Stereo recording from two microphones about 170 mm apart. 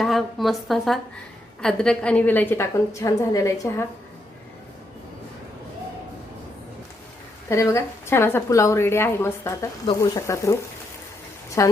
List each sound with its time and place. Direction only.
0.0 s a woman's voice: centre (ahead or behind); by 3.8 s 20° left (ahead or behind)
7.5 s a woman's voice: 15° left (ahead or behind)